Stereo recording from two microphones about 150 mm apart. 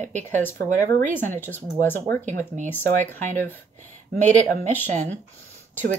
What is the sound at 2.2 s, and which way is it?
Speech, 55° right (ahead or behind).